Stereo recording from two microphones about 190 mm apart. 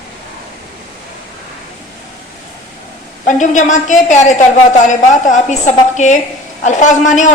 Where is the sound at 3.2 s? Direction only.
40° left (ahead or behind).